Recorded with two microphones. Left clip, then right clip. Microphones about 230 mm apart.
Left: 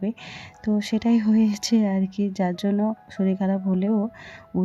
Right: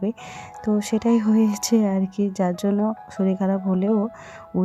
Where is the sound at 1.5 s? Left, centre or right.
Right.